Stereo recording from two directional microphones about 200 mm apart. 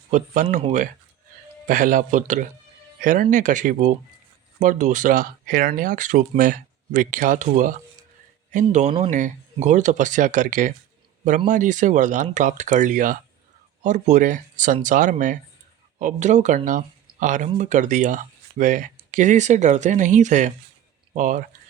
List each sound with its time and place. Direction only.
0.6 s speech: 40° right (ahead or behind)